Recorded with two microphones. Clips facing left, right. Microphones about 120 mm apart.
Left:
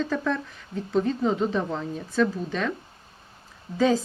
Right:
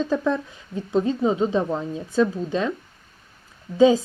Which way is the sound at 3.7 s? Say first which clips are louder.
Right 6 dB; 15° right (ahead or behind).